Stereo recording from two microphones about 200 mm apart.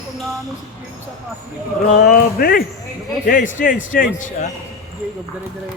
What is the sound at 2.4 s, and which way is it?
Speech, 45° left (ahead or behind).